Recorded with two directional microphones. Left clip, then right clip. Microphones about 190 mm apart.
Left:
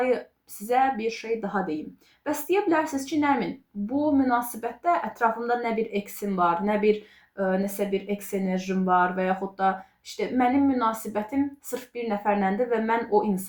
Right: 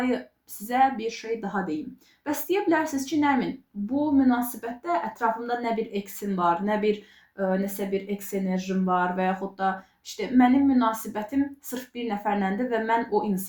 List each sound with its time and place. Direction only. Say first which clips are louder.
0.7 s a woman's voice: even; 15° right (ahead or behind)